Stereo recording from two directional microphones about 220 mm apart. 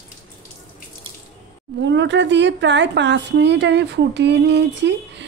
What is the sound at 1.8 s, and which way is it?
A woman's voice, 55° right (ahead or behind).